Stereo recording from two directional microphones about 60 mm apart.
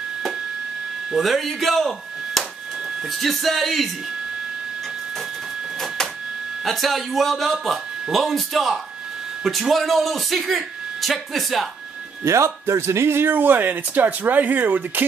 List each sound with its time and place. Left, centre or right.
1.1 s speech: centre
6.6 s speech: centre
12.3 s speech: right